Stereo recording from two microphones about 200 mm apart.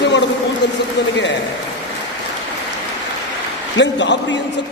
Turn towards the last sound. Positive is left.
turn(degrees=65)  # may be behind; listen again after turning